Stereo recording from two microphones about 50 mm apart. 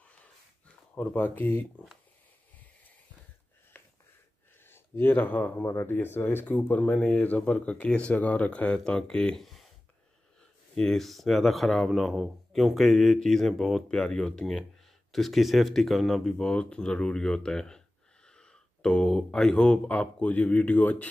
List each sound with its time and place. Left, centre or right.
0.9 s speech: left
4.6 s speech: left
6.4 s speech: left
8.7 s speech: centre
9.4 s a sound: centre
10.8 s speech: centre
15.1 s speech: centre
16.3 s speech: centre; by 21.1 s left